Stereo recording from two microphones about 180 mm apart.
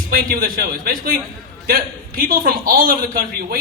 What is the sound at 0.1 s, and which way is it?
A man's voice, 55° right (ahead or behind).